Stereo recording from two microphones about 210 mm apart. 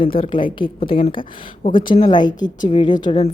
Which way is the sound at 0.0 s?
25° left (ahead or behind).